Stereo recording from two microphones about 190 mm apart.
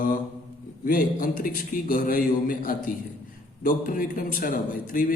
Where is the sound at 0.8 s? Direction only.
45° left (ahead or behind).